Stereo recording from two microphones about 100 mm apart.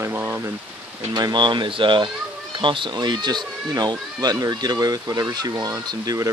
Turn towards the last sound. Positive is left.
turn(degrees=-35)  # may be behind; listen again after turning